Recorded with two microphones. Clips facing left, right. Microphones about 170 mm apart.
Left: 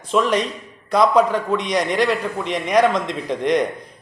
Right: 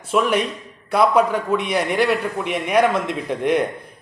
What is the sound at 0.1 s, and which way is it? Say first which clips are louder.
A man's voice: even; 10° right (ahead or behind).